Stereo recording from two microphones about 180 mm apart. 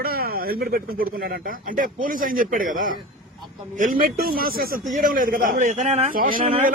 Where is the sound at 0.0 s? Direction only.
55° right (ahead or behind).